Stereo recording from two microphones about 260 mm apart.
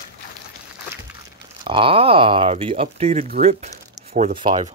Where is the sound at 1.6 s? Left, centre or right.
Centre.